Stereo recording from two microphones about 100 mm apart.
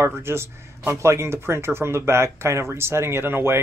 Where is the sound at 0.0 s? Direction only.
25° right (ahead or behind).